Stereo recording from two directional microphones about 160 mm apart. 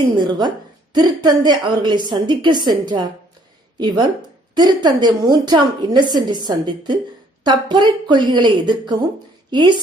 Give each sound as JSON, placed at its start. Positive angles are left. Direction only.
{"t": 0.3, "sound": "a woman's voice", "side_deg": -25}